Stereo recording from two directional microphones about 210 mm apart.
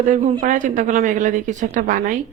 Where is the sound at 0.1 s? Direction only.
35° right (ahead or behind).